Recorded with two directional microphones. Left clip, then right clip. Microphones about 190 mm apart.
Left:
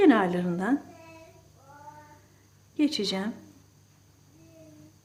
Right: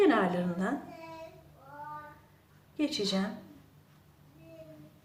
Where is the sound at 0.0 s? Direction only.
55° left (ahead or behind).